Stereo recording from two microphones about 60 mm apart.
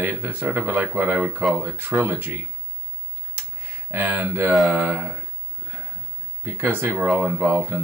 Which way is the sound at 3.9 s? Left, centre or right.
Right.